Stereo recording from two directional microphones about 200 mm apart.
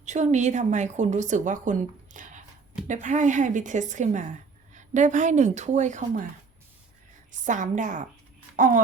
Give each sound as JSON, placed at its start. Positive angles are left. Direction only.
{"t": 0.0, "sound": "a woman's voice", "side_deg": -35}
{"t": 7.4, "sound": "a woman's voice", "side_deg": -40}